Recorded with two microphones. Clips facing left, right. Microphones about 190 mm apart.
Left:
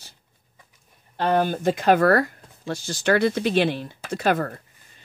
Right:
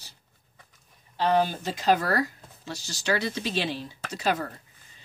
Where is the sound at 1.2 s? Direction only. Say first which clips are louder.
Left 3 dB; 50° left (ahead or behind).